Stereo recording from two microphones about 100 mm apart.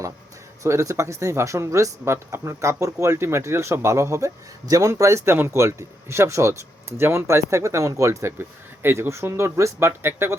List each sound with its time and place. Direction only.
0.6 s speech: 30° right (ahead or behind)